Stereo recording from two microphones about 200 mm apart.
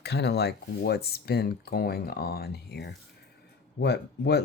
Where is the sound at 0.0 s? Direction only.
55° left (ahead or behind).